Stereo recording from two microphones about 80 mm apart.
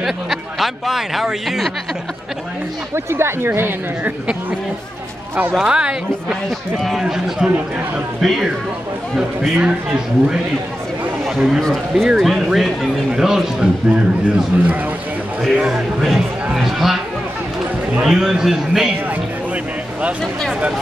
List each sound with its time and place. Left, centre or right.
0.0 s speech: centre
2.9 s speech: right
5.5 s a man's voice: centre
7.3 s a man's voice: centre
8.2 s a man's voice: centre
13.8 s speech: centre
15.5 s a man's voice: centre
18.0 s a man's voice: centre
19.0 s music: centre